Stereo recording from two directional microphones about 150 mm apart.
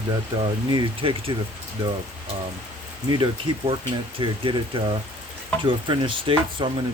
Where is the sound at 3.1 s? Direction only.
30° right (ahead or behind).